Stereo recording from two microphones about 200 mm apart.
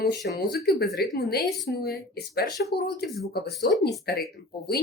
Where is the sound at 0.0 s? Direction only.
55° left (ahead or behind).